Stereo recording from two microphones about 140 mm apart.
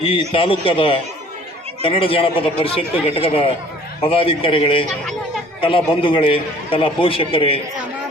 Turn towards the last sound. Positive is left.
turn(degrees=40)  # may be behind; listen again after turning